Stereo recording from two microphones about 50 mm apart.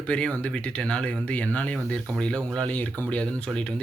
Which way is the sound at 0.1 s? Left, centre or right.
Left.